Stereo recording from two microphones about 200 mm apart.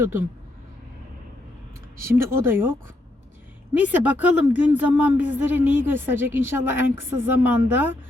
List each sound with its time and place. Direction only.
0.0 s a woman's voice: 10° right (ahead or behind)
2.0 s a woman's voice: 10° right (ahead or behind)
3.8 s a woman's voice: 5° right (ahead or behind)